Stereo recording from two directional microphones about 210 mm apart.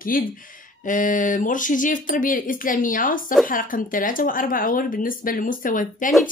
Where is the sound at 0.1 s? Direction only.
40° left (ahead or behind).